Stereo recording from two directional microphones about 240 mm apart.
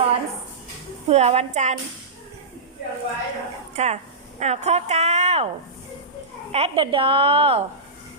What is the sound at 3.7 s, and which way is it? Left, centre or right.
A woman's voice, right.